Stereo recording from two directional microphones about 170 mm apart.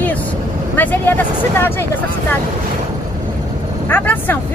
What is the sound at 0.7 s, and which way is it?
Speech, 10° left (ahead or behind).